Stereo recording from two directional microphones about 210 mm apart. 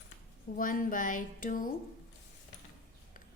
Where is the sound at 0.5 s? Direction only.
40° left (ahead or behind).